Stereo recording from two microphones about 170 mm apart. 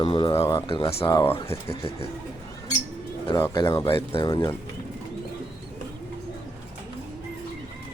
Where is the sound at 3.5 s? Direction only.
25° left (ahead or behind).